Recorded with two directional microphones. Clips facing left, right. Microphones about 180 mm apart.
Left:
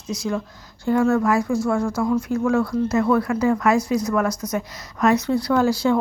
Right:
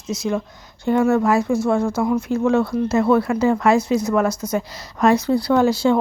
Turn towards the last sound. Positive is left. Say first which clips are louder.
# right 2 dB
turn(degrees=-25)  # may be behind; listen again after turning